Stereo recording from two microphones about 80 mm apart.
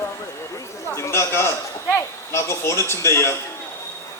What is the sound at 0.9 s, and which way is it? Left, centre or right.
A man's voice, left.